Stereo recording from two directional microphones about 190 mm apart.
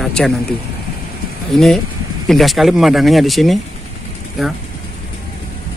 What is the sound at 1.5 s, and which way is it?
Speech, centre (ahead or behind).